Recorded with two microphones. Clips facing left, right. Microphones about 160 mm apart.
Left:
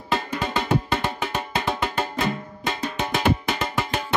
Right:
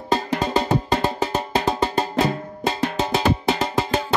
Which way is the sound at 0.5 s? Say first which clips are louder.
Right 2 dB; 35° right (ahead or behind).